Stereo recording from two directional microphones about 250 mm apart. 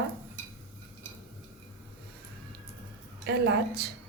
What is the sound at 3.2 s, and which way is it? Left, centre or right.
Speech, right.